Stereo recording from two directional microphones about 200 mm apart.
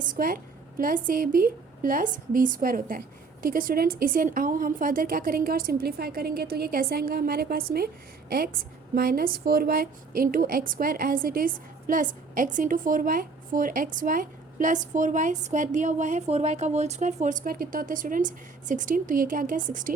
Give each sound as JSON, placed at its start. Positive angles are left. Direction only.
{"t": 0.0, "sound": "a woman's voice", "side_deg": -45}
{"t": 9.0, "sound": "a woman's voice", "side_deg": -50}